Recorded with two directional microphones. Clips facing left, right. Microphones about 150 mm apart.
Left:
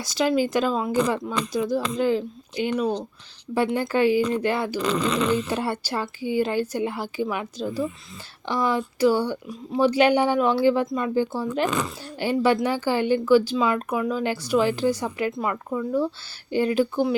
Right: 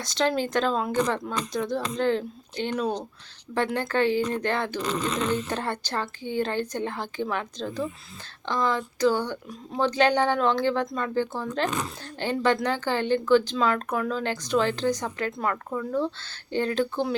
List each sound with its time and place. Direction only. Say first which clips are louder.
0.0 s speech: left 3 dB; 5° left (ahead or behind)